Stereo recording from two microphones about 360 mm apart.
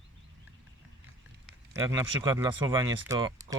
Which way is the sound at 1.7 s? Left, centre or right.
Centre.